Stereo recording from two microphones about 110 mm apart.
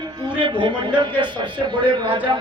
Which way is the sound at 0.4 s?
45° right (ahead or behind).